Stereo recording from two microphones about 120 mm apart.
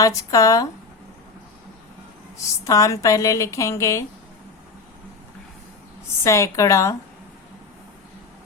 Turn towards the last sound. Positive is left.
turn(degrees=25)  # may be behind; listen again after turning